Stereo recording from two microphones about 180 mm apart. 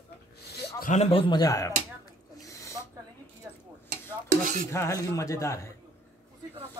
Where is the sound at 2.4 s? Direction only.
15° left (ahead or behind).